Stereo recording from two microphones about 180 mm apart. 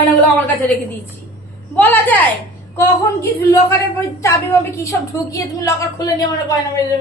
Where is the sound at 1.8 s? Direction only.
10° left (ahead or behind).